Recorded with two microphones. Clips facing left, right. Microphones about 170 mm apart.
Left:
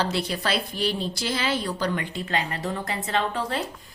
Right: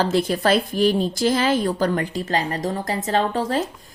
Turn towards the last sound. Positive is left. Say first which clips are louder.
# right 5 dB
turn(degrees=-40)  # may be behind; listen again after turning